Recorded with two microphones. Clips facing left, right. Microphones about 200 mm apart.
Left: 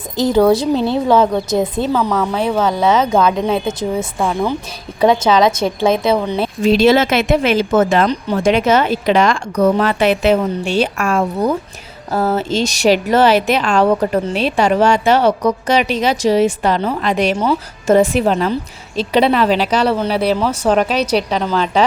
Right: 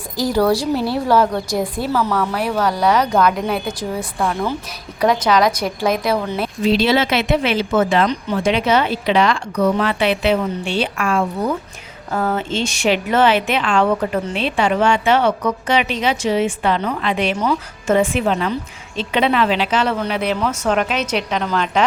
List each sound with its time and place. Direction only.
0.2 s a woman's voice: 20° left (ahead or behind)
6.6 s a woman's voice: 45° left (ahead or behind)